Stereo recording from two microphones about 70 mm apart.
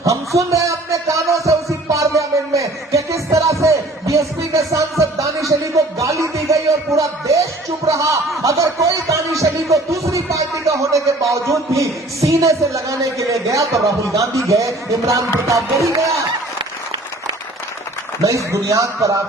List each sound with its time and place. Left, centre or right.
0.0 s music: right
7.9 s a sound: right
9.4 s music: right
12.3 s speech: right
18.3 s speech: right